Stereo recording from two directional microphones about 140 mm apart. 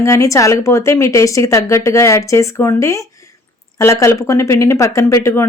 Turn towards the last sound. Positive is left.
turn(degrees=20)  # may be behind; listen again after turning